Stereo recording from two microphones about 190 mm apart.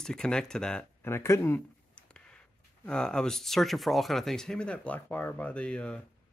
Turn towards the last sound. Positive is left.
turn(degrees=5)  # may be behind; listen again after turning